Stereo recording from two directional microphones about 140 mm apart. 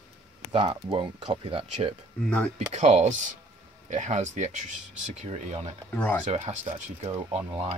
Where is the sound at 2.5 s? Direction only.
55° right (ahead or behind).